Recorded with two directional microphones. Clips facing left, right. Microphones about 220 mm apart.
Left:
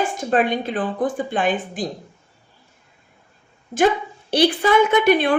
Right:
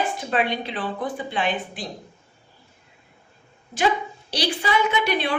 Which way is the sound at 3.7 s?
50° left (ahead or behind).